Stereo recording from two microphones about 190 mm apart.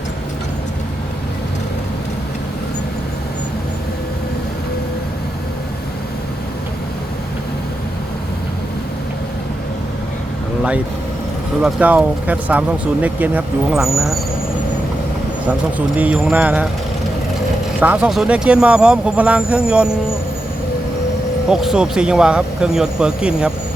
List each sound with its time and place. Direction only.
11.6 s speech: 5° right (ahead or behind)
16.0 s speech: 5° right (ahead or behind)
17.7 s speech: 5° right (ahead or behind)
21.5 s speech: 5° right (ahead or behind)